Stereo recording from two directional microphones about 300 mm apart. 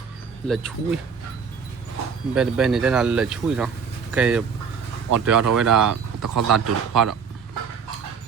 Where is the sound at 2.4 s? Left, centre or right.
Centre.